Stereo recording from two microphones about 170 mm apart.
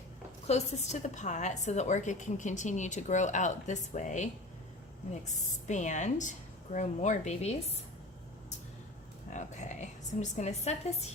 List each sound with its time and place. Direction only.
0.4 s a woman's voice: 40° left (ahead or behind)
5.6 s a woman's voice: 45° left (ahead or behind)
9.3 s a woman's voice: 45° left (ahead or behind)